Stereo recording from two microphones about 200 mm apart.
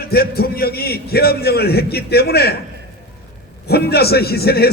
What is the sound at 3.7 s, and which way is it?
A man's voice, 50° left (ahead or behind).